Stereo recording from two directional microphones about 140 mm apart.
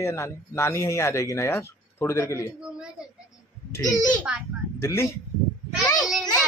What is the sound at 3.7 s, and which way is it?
Speech, 25° left (ahead or behind).